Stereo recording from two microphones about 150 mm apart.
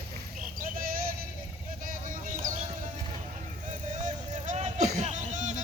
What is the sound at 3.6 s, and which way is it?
Music, 55° right (ahead or behind).